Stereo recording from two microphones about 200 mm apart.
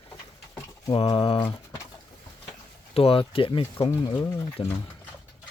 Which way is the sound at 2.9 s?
30° left (ahead or behind).